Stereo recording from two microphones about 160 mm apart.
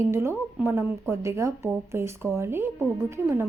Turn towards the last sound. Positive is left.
turn(degrees=-15)  # may be behind; listen again after turning